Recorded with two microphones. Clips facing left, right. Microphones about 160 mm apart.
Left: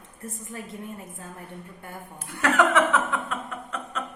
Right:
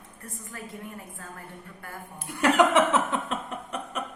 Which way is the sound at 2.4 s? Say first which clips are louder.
Right 1 dB; 15° right (ahead or behind).